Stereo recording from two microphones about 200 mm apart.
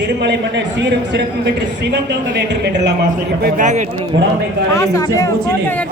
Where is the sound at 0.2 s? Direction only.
60° right (ahead or behind).